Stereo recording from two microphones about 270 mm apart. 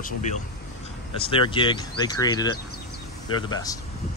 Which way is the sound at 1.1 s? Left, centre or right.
Centre.